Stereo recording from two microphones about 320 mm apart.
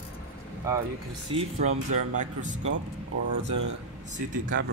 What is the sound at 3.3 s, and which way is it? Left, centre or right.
Speech, right.